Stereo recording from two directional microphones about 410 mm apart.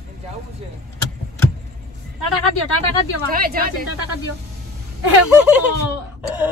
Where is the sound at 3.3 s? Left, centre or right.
Right.